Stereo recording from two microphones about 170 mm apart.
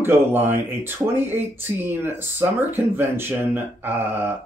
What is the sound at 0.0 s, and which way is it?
Speech, 15° right (ahead or behind).